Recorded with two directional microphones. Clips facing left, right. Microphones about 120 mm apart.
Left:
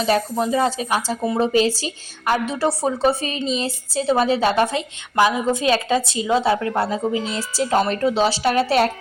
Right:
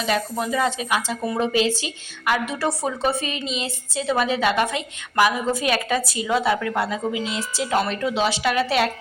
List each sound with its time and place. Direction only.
0.0 s a woman's voice: 35° left (ahead or behind)